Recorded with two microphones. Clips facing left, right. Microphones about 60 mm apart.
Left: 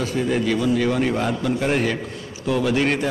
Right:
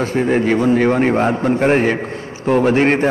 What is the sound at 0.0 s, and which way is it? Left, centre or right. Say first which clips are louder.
A man's voice: right 6 dB; right.